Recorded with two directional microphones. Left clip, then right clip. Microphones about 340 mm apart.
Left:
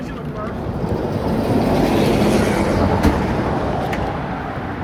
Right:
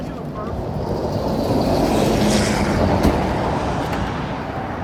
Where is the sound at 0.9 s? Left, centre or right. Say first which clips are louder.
Left 1 dB; left.